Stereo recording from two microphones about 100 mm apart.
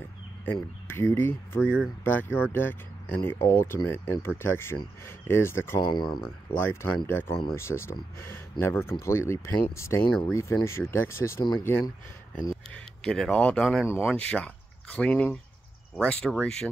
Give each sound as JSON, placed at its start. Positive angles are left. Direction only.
{"t": 0.5, "sound": "speech", "side_deg": 20}
{"t": 5.8, "sound": "speech", "side_deg": 50}
{"t": 6.5, "sound": "speech", "side_deg": 20}
{"t": 12.7, "sound": "speech", "side_deg": 5}
{"t": 13.8, "sound": "speech", "side_deg": 20}